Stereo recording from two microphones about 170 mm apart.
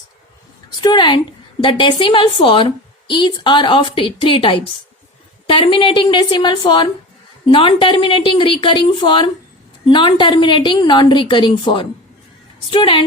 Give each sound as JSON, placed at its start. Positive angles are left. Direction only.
{"t": 0.8, "sound": "a woman's voice", "side_deg": 25}